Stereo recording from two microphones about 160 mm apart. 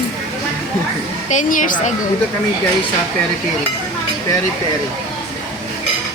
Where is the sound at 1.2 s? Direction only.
50° left (ahead or behind).